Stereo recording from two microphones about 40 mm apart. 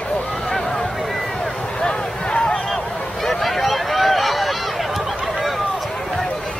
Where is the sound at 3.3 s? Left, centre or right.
Centre.